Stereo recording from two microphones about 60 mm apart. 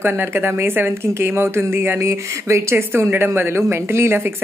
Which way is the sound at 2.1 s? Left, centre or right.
Right.